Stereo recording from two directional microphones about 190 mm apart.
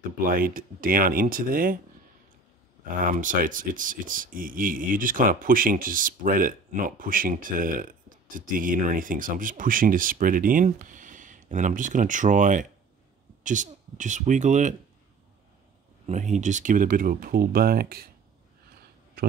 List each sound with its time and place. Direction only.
0.3 s speech: 50° right (ahead or behind)
2.8 s speech: 45° right (ahead or behind)
16.1 s speech: 40° right (ahead or behind)
19.2 s speech: 55° right (ahead or behind)